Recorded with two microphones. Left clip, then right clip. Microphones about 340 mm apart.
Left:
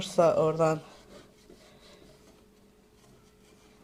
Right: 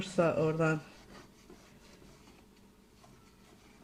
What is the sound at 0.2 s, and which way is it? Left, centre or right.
Speech, left.